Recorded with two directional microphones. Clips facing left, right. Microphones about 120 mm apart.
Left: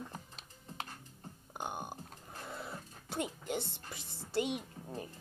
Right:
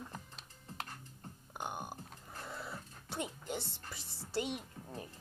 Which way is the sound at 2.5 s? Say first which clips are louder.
Left 1 dB; 20° left (ahead or behind).